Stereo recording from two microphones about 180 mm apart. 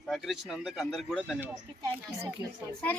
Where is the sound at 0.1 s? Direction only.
Centre (ahead or behind).